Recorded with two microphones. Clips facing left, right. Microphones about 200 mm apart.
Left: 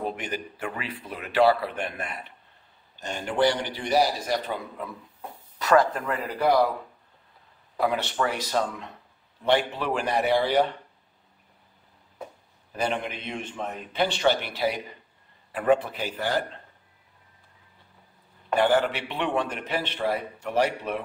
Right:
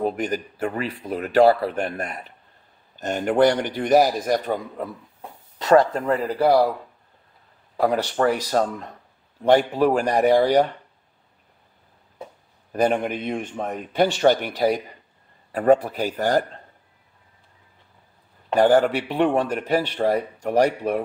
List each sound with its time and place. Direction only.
0.0 s a man's voice: 40° right (ahead or behind)
5.6 s speech: 30° right (ahead or behind)
7.8 s a man's voice: 40° right (ahead or behind)
12.7 s a man's voice: 50° right (ahead or behind)
18.5 s a man's voice: 45° right (ahead or behind)